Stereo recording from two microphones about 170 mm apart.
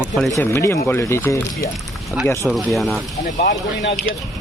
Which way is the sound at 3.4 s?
75° left (ahead or behind).